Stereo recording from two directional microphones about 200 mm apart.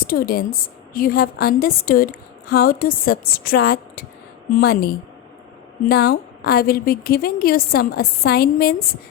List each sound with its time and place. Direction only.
0.1 s a woman's voice: 50° left (ahead or behind)